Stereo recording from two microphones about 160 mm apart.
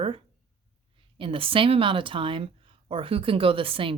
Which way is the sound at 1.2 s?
35° right (ahead or behind).